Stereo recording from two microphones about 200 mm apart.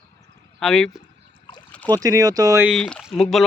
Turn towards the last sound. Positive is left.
turn(degrees=0)  # may be behind; listen again after turning